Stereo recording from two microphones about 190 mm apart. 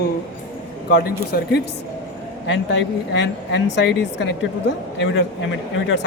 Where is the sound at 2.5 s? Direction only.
70° left (ahead or behind).